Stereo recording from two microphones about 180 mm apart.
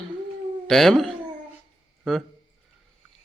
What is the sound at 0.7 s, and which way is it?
Speech, centre (ahead or behind).